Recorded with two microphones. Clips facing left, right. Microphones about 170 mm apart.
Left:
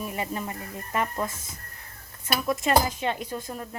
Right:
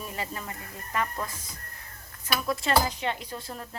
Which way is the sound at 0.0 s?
20° left (ahead or behind).